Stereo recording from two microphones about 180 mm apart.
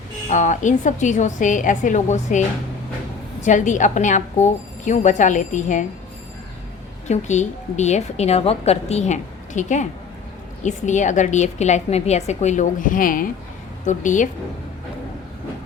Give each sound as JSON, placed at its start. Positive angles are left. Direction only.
{"t": 0.3, "sound": "a woman's voice", "side_deg": 45}
{"t": 3.4, "sound": "a woman's voice", "side_deg": 45}
{"t": 7.1, "sound": "a woman's voice", "side_deg": 40}